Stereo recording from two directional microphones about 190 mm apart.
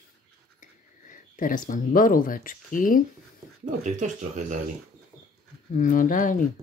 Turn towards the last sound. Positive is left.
turn(degrees=45)  # may be behind; listen again after turning